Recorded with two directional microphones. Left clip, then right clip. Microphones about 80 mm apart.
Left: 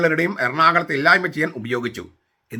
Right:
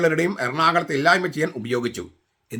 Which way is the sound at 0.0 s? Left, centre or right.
Right.